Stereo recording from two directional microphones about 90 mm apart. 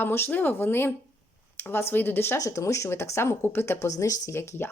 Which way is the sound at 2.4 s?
35° left (ahead or behind).